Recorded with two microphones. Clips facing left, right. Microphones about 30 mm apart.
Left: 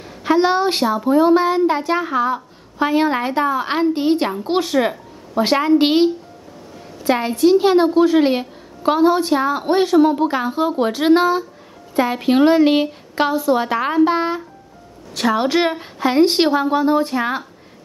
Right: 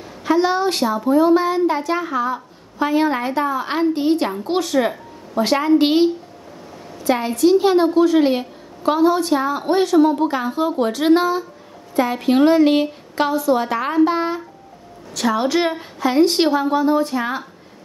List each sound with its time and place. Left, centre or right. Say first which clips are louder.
0.2 s a woman's voice: left 2 dB; left
7.1 s a woman's voice: left 1 dB; left
15.1 s a woman's voice: left 1 dB; left